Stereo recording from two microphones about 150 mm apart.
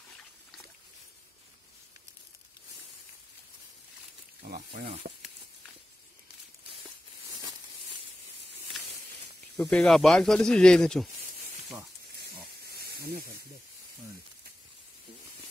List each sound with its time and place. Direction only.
4.6 s speech: 55° right (ahead or behind)
9.6 s speech: 5° left (ahead or behind)
12.2 s pig: 90° right